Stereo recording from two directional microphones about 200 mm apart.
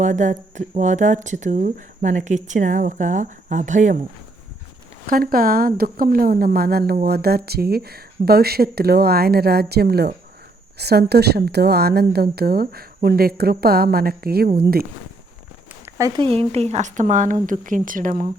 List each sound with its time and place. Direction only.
0.0 s speech: 40° right (ahead or behind)
5.0 s a woman's voice: 45° right (ahead or behind)
15.7 s a sound: 15° right (ahead or behind)
16.3 s speech: 30° right (ahead or behind)